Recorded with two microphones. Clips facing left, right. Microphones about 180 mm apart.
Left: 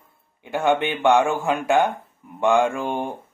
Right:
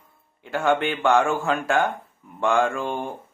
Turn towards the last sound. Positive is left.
turn(degrees=15)  # may be behind; listen again after turning